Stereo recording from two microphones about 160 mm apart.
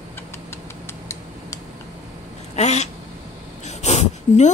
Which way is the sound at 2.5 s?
45° left (ahead or behind).